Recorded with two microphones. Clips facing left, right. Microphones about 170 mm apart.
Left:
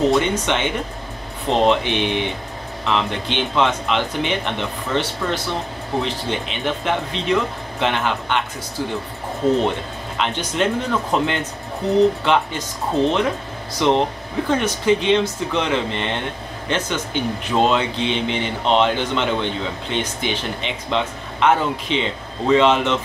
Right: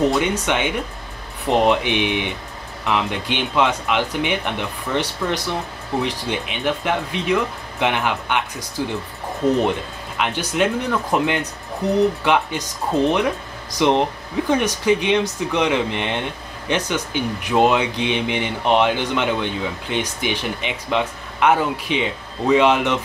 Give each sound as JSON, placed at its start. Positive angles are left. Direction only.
{"t": 0.1, "sound": "speech", "side_deg": -10}
{"t": 10.1, "sound": "speech", "side_deg": -10}